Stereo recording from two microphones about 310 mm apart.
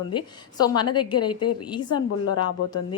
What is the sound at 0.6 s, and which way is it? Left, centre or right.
Speech, centre.